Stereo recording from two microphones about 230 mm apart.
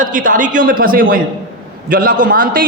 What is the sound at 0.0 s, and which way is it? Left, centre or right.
A man's voice, right.